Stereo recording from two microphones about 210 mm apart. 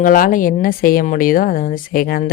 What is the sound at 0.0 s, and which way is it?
A woman's voice, 40° left (ahead or behind).